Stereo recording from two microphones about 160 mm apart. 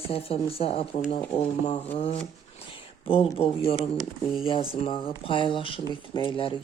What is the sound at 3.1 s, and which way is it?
Speech, 35° left (ahead or behind).